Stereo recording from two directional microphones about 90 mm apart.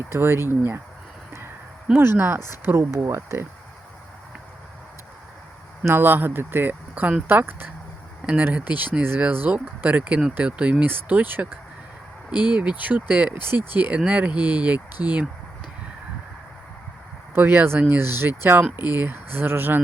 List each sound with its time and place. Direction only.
0.1 s speech: 25° right (ahead or behind)
1.9 s speech: 25° right (ahead or behind)
5.8 s speech: 25° right (ahead or behind)
12.3 s speech: 50° left (ahead or behind)
12.5 s speech: 20° right (ahead or behind)
17.3 s speech: 20° right (ahead or behind)